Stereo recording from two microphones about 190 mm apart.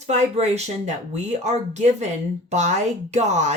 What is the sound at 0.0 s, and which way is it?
Speech, 35° right (ahead or behind).